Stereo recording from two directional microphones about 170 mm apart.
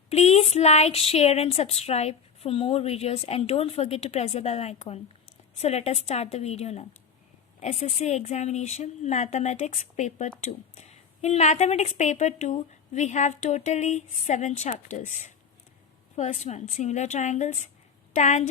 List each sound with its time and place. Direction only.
0.1 s a woman's voice: 40° left (ahead or behind)